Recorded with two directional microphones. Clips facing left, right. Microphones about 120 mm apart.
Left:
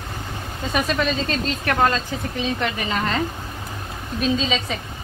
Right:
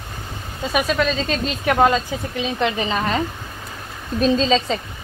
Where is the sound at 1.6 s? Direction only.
15° right (ahead or behind).